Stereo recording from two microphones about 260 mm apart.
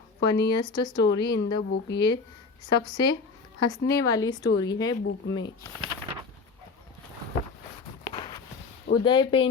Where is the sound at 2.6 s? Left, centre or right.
Centre.